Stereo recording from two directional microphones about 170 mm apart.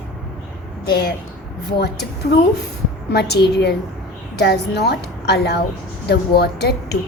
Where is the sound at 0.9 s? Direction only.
70° left (ahead or behind).